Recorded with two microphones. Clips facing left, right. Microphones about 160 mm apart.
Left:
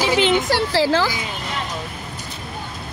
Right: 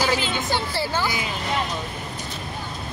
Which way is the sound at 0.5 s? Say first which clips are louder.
Left 7 dB; 90° left.